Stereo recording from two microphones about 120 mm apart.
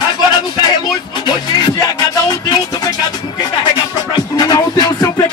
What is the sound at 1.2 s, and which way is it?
Speech, 35° left (ahead or behind).